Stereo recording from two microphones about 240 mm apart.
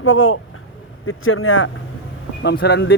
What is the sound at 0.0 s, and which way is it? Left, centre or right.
Speech, left.